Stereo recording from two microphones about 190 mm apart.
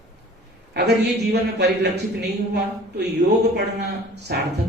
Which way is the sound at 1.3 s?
60° right (ahead or behind).